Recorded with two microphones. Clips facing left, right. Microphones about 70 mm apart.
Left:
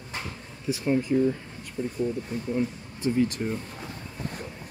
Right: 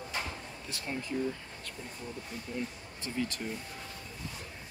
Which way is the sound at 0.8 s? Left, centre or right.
Left.